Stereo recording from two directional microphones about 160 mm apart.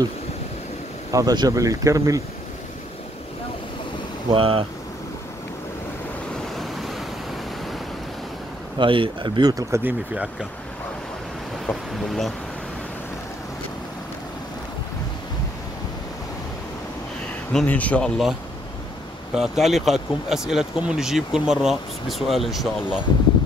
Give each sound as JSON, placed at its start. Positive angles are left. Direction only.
{"t": 1.1, "sound": "speech", "side_deg": -25}
{"t": 4.3, "sound": "speech", "side_deg": -35}
{"t": 6.5, "sound": "waves", "side_deg": 0}
{"t": 8.7, "sound": "speech", "side_deg": -30}
{"t": 11.6, "sound": "speech", "side_deg": 0}
{"t": 17.5, "sound": "speech", "side_deg": 5}
{"t": 19.3, "sound": "speech", "side_deg": -5}